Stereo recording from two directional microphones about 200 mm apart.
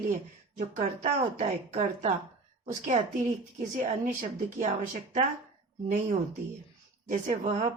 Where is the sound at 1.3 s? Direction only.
35° right (ahead or behind).